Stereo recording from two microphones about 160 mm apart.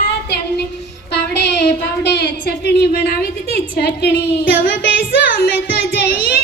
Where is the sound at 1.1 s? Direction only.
90° left.